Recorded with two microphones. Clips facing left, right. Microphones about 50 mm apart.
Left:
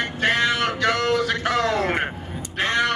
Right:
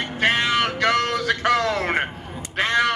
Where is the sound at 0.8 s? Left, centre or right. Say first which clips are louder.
Even; right.